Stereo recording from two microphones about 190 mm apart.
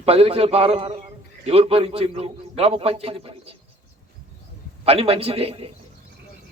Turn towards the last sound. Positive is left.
turn(degrees=-30)  # may be behind; listen again after turning